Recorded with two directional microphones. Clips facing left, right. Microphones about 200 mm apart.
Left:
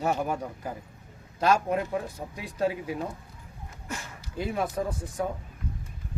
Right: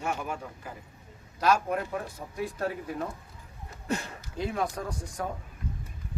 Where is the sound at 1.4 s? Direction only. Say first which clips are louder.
Left 2 dB; 25° left (ahead or behind).